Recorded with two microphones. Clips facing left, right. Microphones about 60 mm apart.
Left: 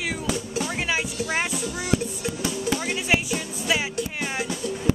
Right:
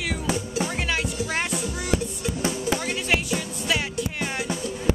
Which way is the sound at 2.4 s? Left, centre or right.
Right.